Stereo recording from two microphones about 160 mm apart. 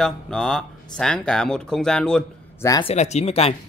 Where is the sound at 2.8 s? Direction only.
45° left (ahead or behind).